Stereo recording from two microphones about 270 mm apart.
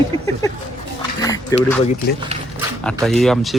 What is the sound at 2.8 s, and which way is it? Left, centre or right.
Speech, centre.